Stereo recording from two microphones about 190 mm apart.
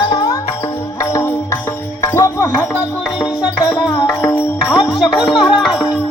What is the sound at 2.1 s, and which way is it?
Music, 15° left (ahead or behind).